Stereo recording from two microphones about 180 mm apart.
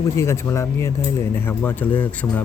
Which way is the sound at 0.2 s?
15° left (ahead or behind).